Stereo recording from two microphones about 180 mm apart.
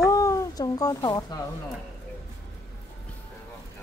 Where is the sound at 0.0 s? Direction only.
20° left (ahead or behind).